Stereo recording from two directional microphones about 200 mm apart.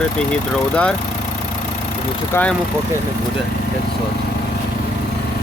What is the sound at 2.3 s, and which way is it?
Speech, 5° left (ahead or behind).